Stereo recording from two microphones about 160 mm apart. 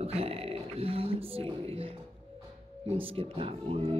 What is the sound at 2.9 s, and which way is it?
Speech, 35° right (ahead or behind).